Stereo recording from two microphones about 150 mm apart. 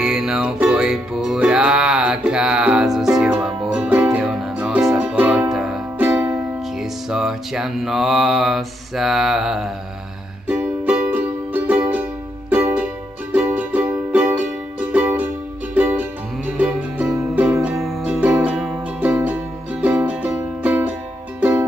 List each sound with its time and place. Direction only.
0.0 s music: 5° right (ahead or behind)